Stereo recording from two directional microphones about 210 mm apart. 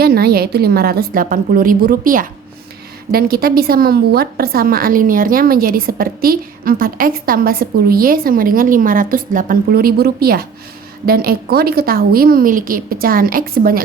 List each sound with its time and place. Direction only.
0.0 s a woman's voice: 45° right (ahead or behind)